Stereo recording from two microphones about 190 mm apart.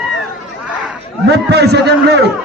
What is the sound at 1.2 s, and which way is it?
A man's voice, 60° right (ahead or behind).